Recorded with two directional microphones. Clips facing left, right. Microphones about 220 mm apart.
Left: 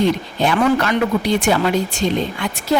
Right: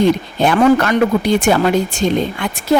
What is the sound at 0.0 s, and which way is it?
Speech, 50° right (ahead or behind).